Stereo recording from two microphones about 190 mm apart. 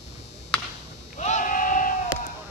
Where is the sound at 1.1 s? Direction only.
40° left (ahead or behind).